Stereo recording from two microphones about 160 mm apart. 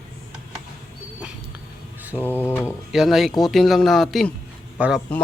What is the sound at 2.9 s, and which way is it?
Speech, centre (ahead or behind).